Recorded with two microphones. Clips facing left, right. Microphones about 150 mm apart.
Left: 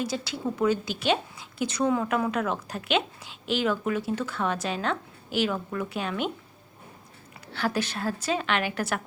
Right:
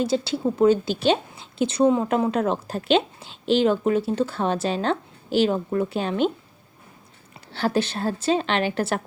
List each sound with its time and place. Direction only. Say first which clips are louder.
0.0 s a woman's voice: right 7 dB; 30° right (ahead or behind)
7.5 s a woman's voice: right 5 dB; 30° right (ahead or behind)